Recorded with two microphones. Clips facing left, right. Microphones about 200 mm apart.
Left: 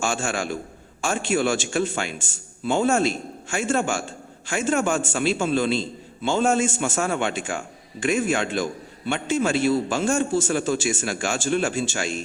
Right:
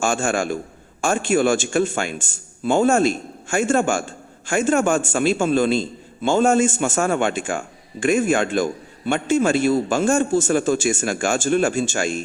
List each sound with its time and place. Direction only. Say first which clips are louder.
0.0 s a man's voice: right 5 dB; 50° right (ahead or behind)